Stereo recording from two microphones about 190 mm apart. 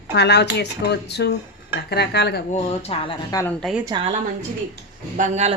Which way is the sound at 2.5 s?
30° left (ahead or behind).